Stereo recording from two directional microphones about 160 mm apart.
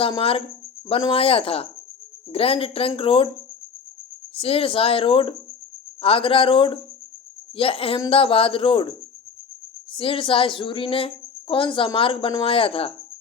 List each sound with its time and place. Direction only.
0.2 s a woman's voice: 35° left (ahead or behind)
4.4 s a woman's voice: 35° left (ahead or behind)
9.9 s a woman's voice: 35° left (ahead or behind)